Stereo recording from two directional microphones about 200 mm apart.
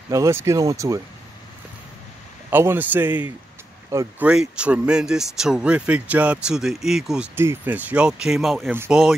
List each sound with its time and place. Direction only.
0.1 s speech: 15° right (ahead or behind)
2.5 s speech: 10° right (ahead or behind)
4.3 s speech: 5° right (ahead or behind)